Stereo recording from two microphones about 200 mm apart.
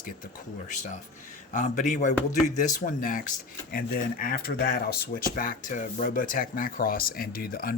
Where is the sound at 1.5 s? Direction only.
40° left (ahead or behind).